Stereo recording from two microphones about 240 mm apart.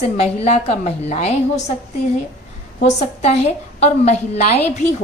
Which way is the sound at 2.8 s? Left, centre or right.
Left.